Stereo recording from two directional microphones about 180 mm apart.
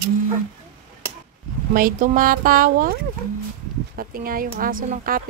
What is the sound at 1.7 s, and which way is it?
A woman's voice, 50° right (ahead or behind).